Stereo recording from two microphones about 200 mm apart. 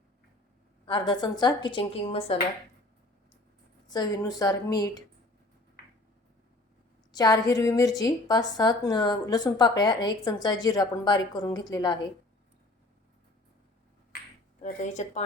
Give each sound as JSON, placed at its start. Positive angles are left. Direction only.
{"t": 0.9, "sound": "a woman's voice", "side_deg": 25}
{"t": 3.8, "sound": "a woman's voice", "side_deg": 20}
{"t": 7.1, "sound": "a woman's voice", "side_deg": 20}
{"t": 14.6, "sound": "speech", "side_deg": 35}